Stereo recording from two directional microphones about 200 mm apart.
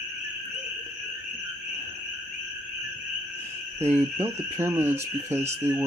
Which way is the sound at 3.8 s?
10° right (ahead or behind).